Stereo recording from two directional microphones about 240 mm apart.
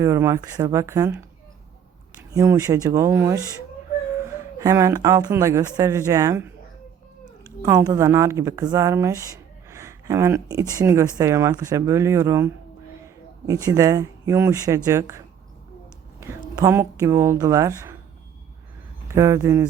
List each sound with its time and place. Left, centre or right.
0.0 s speech: centre
2.3 s speech: centre
4.6 s speech: centre
7.6 s speech: centre
13.5 s speech: centre
16.2 s speech: centre
19.1 s speech: centre